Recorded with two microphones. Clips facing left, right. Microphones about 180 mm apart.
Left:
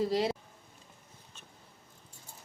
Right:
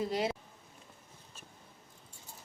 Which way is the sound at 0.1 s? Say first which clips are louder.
Left 3 dB; 35° left (ahead or behind).